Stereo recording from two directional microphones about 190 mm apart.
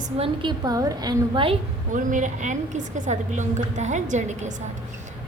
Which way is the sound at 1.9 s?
40° right (ahead or behind).